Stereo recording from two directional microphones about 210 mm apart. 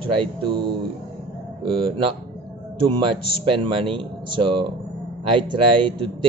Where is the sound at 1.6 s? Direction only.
25° right (ahead or behind).